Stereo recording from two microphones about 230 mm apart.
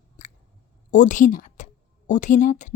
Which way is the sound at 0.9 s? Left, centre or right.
Left.